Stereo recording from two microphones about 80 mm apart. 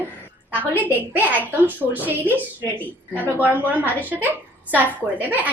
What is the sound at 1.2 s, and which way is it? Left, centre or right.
A woman's voice, right.